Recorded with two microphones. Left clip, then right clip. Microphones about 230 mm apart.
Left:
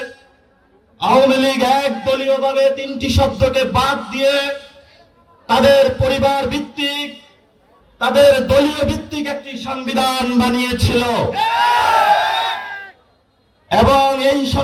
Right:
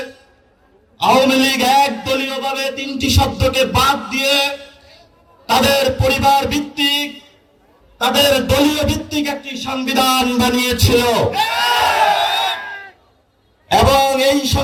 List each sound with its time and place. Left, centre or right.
0.9 s a man's voice: right
5.5 s a sound: right
7.9 s a man's voice: right
13.7 s a man's voice: right